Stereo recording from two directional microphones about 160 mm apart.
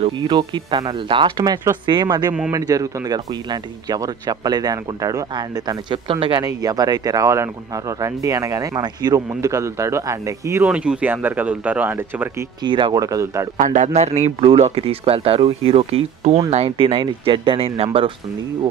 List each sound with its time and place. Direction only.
0.0 s speech: 25° right (ahead or behind)
10.6 s speech: 5° right (ahead or behind)
12.6 s speech: 30° right (ahead or behind)
13.6 s a man's voice: 50° right (ahead or behind)